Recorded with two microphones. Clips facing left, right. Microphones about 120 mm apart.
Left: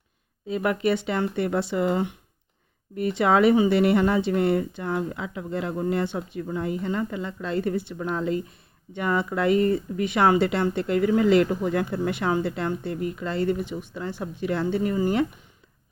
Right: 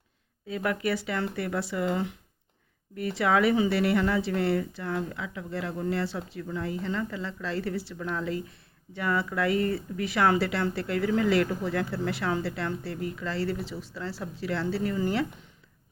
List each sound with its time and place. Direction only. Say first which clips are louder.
0.4 s a woman's voice: left 5 dB; 25° left (ahead or behind)